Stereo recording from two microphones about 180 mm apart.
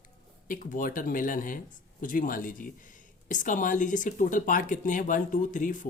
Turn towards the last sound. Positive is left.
turn(degrees=45)  # may be behind; listen again after turning